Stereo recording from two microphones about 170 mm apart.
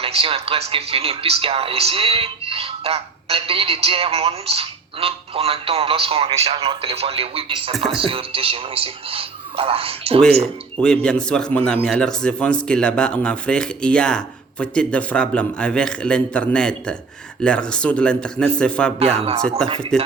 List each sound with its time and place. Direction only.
0.0 s speech: 35° right (ahead or behind)
10.8 s speech: 5° left (ahead or behind)